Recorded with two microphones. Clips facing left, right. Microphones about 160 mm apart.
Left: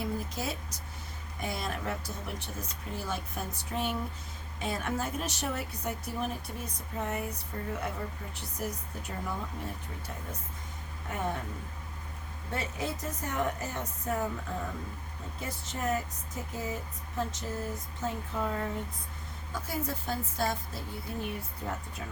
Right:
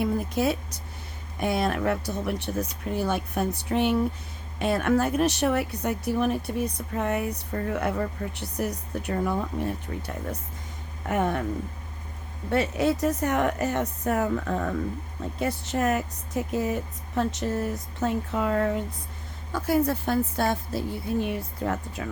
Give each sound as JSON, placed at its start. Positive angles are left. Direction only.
{"t": 0.0, "sound": "speech", "side_deg": -65}
{"t": 11.1, "sound": "speech", "side_deg": -75}
{"t": 12.5, "sound": "speech", "side_deg": -70}